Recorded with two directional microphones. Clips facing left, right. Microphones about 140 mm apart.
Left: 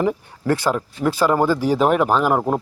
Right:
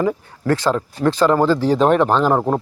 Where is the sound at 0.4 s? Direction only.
10° left (ahead or behind).